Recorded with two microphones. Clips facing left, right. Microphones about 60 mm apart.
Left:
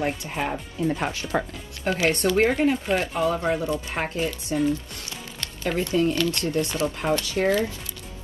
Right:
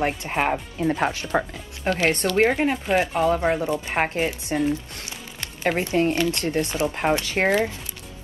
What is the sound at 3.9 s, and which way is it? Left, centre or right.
Speech, right.